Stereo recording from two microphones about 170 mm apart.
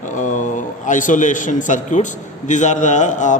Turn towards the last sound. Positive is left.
turn(degrees=45)  # may be behind; listen again after turning